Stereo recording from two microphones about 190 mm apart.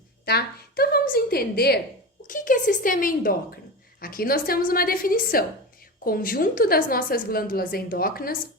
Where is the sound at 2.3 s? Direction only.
45° left (ahead or behind).